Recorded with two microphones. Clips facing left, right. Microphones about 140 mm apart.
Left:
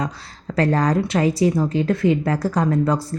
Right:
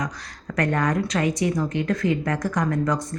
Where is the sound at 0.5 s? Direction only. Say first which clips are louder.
Left 4 dB; 30° left (ahead or behind).